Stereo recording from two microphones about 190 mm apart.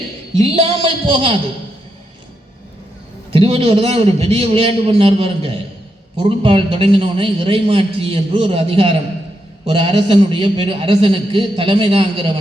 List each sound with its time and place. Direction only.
0.5 s a man's voice: 30° right (ahead or behind)
3.3 s a man's voice: 30° right (ahead or behind)